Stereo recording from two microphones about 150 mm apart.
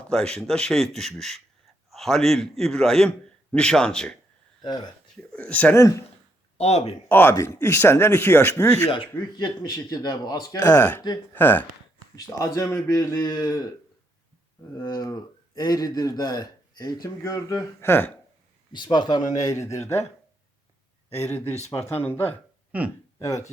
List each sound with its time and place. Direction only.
0.1 s speech: 5° left (ahead or behind)
4.6 s speech: 25° left (ahead or behind)
5.1 s speech: 10° left (ahead or behind)
6.6 s speech: 45° left (ahead or behind)
7.1 s speech: 15° left (ahead or behind)
9.3 s speech: 30° left (ahead or behind)
14.8 s speech: 25° left (ahead or behind)
18.7 s speech: 30° left (ahead or behind)
21.2 s speech: 15° left (ahead or behind)
22.7 s speech: 10° right (ahead or behind)